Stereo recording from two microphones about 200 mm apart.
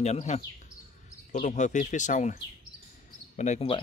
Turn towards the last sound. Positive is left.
turn(degrees=30)  # may be behind; listen again after turning